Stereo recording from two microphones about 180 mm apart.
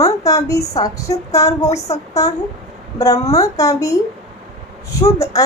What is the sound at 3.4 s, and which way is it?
A woman's voice, 20° left (ahead or behind).